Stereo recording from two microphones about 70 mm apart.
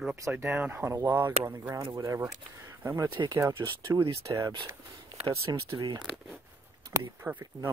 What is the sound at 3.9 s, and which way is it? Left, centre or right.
Speech, right.